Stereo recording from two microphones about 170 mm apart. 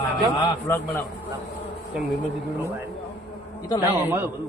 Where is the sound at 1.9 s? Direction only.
5° right (ahead or behind).